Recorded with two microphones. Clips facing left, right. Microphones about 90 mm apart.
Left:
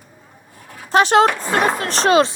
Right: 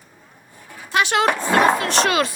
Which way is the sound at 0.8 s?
35° left (ahead or behind).